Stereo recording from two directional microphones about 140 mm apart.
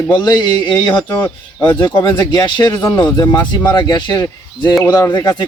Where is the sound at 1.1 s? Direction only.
15° left (ahead or behind).